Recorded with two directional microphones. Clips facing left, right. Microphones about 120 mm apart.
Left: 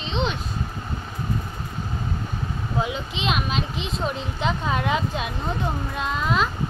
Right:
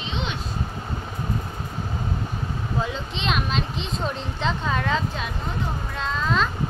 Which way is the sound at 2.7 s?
15° left (ahead or behind).